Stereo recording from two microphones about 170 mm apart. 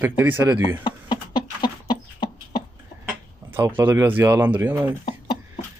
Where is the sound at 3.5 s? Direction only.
15° right (ahead or behind).